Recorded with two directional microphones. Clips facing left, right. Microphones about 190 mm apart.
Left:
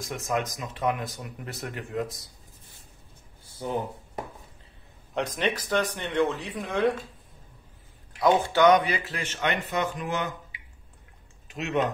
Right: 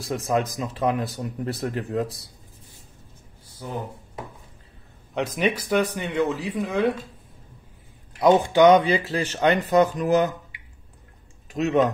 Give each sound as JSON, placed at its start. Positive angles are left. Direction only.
{"t": 0.0, "sound": "speech", "side_deg": -35}
{"t": 5.1, "sound": "speech", "side_deg": -5}
{"t": 8.2, "sound": "speech", "side_deg": -20}
{"t": 11.4, "sound": "speech", "side_deg": -40}